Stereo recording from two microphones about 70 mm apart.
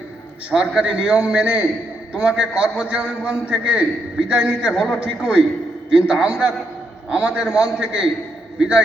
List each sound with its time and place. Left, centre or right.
0.5 s a man's voice: centre